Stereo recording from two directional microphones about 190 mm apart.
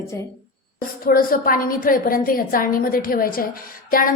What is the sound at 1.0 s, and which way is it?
A woman's voice, 50° left (ahead or behind).